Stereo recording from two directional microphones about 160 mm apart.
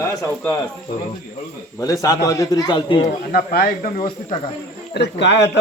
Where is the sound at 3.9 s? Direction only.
35° left (ahead or behind).